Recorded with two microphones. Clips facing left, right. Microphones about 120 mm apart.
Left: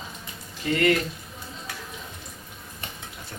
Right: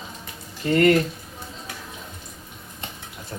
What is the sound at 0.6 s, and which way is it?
Speech, 40° right (ahead or behind).